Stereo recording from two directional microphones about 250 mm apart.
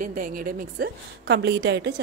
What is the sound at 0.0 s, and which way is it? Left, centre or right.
A woman's voice, right.